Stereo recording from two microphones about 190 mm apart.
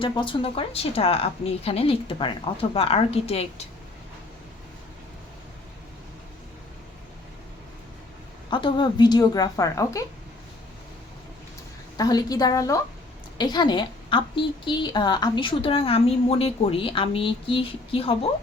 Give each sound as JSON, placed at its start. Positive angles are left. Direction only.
{"t": 0.0, "sound": "a woman's voice", "side_deg": 25}
{"t": 8.4, "sound": "a woman's voice", "side_deg": 25}
{"t": 11.9, "sound": "a woman's voice", "side_deg": 20}